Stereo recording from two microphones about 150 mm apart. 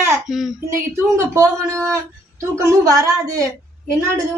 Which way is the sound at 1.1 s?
20° right (ahead or behind).